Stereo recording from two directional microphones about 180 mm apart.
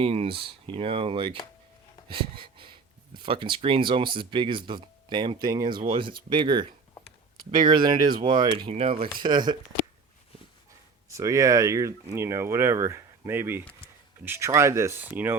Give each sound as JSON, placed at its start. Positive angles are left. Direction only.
{"t": 0.0, "sound": "speech", "side_deg": -30}
{"t": 2.0, "sound": "a sound", "side_deg": -30}
{"t": 3.2, "sound": "speech", "side_deg": -25}
{"t": 11.1, "sound": "speech", "side_deg": -15}